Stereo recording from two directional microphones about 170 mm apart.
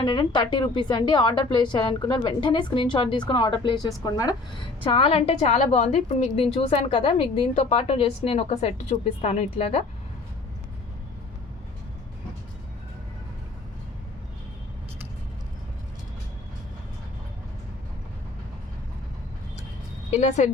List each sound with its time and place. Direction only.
0.0 s a woman's voice: 25° left (ahead or behind)
20.1 s a woman's voice: 40° left (ahead or behind)